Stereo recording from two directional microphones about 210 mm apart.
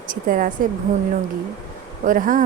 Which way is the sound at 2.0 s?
40° right (ahead or behind).